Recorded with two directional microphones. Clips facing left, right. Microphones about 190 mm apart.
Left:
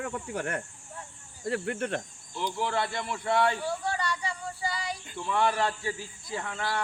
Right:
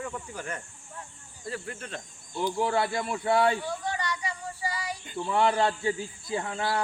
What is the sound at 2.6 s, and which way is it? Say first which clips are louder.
Speech: right 3 dB; 25° right (ahead or behind).